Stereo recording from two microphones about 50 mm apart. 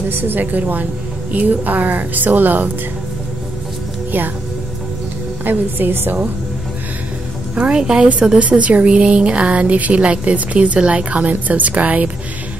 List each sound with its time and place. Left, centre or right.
0.1 s a woman's voice: right
5.4 s a woman's voice: right
7.5 s speech: right